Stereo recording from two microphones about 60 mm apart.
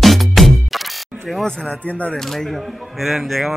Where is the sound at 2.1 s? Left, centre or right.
Centre.